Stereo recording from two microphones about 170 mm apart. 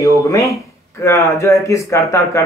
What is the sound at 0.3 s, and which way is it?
Speech, 20° left (ahead or behind).